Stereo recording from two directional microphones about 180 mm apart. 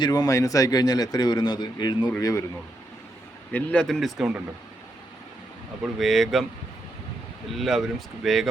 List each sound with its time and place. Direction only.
0.0 s a man's voice: 20° left (ahead or behind)
3.5 s speech: 5° left (ahead or behind)
5.8 s speech: centre (ahead or behind)
7.5 s speech: centre (ahead or behind)